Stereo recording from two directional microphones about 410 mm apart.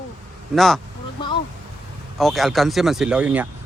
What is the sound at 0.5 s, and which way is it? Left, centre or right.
Speech, centre.